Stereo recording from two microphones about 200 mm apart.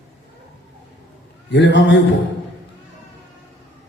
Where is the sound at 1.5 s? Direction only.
60° left (ahead or behind).